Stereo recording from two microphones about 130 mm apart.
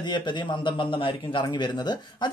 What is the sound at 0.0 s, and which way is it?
Speech, 35° left (ahead or behind).